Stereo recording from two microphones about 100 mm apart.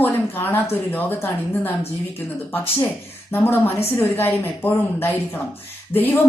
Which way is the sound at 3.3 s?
20° left (ahead or behind).